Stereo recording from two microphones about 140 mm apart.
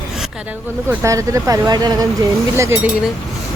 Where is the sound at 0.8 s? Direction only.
20° right (ahead or behind).